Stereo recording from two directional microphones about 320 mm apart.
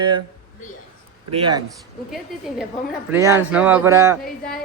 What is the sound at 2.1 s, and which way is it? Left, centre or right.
A woman's voice, centre.